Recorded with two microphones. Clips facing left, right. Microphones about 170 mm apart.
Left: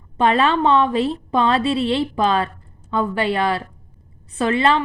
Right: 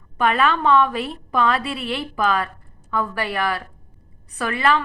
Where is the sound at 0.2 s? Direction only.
25° left (ahead or behind).